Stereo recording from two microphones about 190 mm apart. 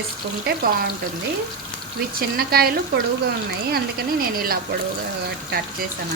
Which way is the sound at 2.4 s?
55° right (ahead or behind).